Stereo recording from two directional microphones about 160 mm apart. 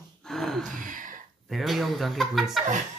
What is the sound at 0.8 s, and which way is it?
Speech, 55° right (ahead or behind).